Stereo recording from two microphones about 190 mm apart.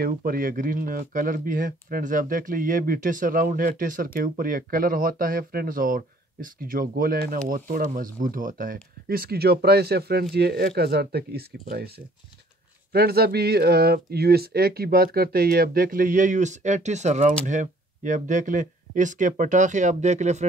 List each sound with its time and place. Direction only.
0.0 s speech: 50° right (ahead or behind)
12.9 s speech: 55° right (ahead or behind); by 20.4 s 35° right (ahead or behind)